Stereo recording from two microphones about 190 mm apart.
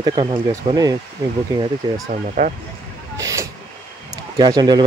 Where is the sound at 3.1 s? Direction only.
15° right (ahead or behind).